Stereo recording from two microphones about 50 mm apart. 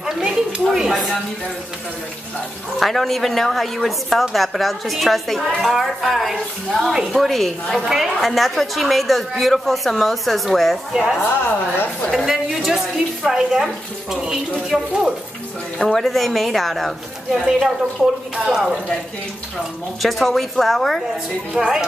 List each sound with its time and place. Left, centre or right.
0.0 s a sound: centre
0.5 s a woman's voice: centre
2.8 s a woman's voice: centre
10.9 s a woman's voice: centre
11.1 s a woman's voice: left
12.1 s a woman's voice: centre
15.8 s a woman's voice: centre
17.5 s a woman's voice: centre
20.0 s a woman's voice: centre
21.5 s a woman's voice: centre